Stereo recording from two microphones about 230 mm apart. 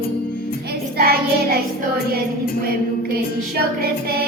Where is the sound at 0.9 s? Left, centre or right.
Right.